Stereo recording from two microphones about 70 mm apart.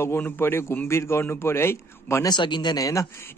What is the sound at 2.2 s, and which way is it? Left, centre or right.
Speech, left.